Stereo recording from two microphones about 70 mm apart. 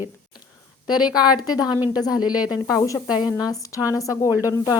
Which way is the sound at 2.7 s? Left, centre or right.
Left.